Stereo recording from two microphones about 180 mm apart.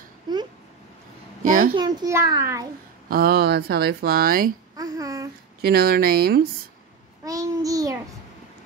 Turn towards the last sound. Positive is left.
turn(degrees=-20)  # may be behind; listen again after turning